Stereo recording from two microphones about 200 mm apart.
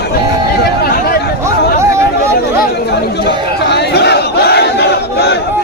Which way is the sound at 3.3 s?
55° left (ahead or behind).